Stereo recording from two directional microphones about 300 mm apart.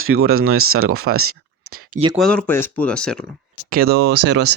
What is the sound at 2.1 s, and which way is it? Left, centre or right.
Speech, centre.